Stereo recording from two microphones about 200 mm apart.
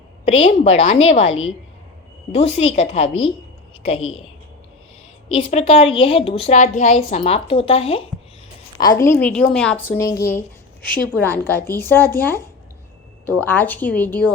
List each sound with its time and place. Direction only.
0.3 s a woman's voice: 30° left (ahead or behind)
5.3 s a woman's voice: 30° left (ahead or behind)
8.8 s a woman's voice: 15° left (ahead or behind)
9.9 s a woman's voice: 15° left (ahead or behind)